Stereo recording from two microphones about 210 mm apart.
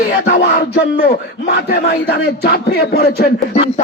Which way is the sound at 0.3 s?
50° left (ahead or behind).